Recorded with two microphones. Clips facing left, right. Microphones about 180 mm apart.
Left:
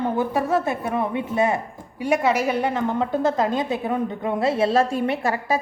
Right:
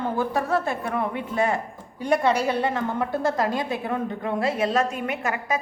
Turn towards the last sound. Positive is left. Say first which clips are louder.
# left 4 dB
turn(degrees=35)  # may be behind; listen again after turning